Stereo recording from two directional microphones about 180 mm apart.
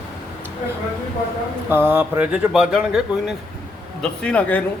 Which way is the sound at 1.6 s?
10° right (ahead or behind).